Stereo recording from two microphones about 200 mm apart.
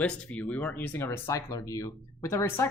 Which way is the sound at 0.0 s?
5° left (ahead or behind).